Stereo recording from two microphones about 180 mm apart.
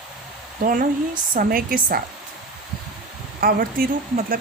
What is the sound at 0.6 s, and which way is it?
Speech, 50° right (ahead or behind).